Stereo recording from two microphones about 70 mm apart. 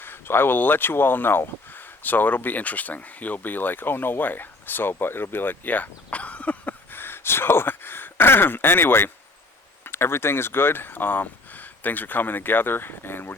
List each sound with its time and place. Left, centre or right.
0.0 s speech: left